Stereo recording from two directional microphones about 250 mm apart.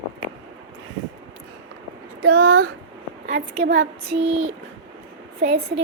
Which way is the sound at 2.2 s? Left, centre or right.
Right.